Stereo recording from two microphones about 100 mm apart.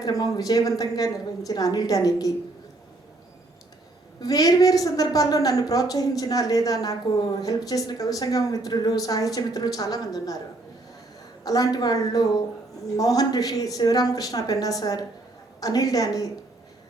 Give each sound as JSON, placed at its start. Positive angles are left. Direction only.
{"t": 0.0, "sound": "a woman's voice", "side_deg": 40}
{"t": 4.2, "sound": "a woman's voice", "side_deg": 40}
{"t": 11.4, "sound": "a woman's voice", "side_deg": 40}